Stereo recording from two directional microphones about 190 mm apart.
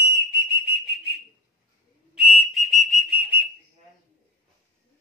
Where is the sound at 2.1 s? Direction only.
Centre (ahead or behind).